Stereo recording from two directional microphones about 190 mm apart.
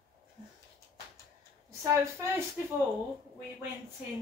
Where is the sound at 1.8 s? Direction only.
15° right (ahead or behind).